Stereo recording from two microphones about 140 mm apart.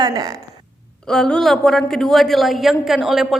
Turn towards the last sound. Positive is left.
turn(degrees=0)  # may be behind; listen again after turning